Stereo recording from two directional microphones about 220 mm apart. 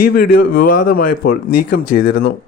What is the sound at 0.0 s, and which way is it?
A man's voice, 45° left (ahead or behind).